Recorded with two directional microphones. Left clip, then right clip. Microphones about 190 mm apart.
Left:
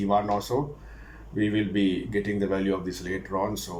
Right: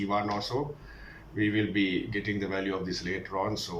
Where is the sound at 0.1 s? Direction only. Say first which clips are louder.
Left 7 dB; 30° left (ahead or behind).